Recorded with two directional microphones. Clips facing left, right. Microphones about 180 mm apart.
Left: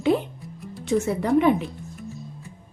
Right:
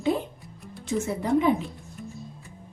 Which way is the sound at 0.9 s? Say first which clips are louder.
Left 5 dB; 90° left.